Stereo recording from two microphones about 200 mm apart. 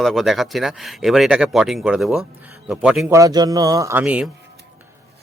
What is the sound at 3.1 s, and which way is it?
Speech, 15° right (ahead or behind).